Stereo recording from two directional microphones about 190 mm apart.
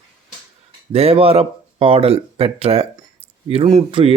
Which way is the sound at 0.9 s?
30° right (ahead or behind).